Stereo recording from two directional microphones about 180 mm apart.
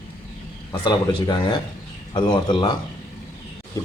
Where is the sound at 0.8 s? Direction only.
25° left (ahead or behind).